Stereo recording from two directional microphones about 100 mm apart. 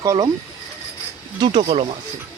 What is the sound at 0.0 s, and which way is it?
Speech, 35° right (ahead or behind).